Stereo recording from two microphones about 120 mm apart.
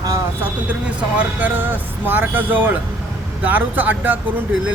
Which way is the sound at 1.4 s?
15° right (ahead or behind).